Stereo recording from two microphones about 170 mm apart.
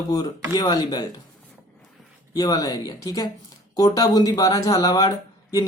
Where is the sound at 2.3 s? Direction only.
20° left (ahead or behind).